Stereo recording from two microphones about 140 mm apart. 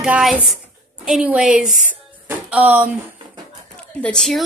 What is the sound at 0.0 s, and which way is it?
A woman's voice, 5° right (ahead or behind).